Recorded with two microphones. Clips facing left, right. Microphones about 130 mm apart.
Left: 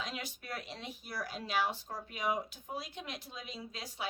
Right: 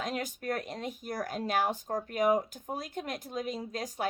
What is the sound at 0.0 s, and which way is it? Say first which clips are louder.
A woman's voice: right 8 dB; 45° right (ahead or behind).